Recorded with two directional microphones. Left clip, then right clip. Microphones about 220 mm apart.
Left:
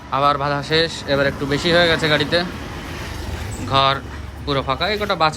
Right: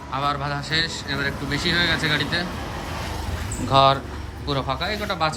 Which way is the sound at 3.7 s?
20° right (ahead or behind).